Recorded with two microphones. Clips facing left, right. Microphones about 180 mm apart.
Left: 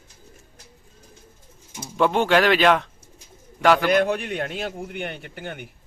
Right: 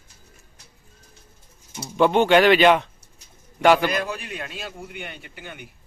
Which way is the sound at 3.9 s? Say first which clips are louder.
Left 7 dB; 65° left (ahead or behind).